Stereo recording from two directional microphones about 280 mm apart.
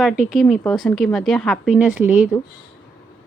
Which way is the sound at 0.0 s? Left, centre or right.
Centre.